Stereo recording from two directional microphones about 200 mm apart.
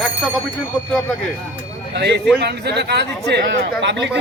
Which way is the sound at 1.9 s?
55° right (ahead or behind).